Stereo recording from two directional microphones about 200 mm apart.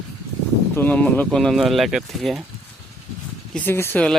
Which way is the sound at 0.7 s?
10° left (ahead or behind).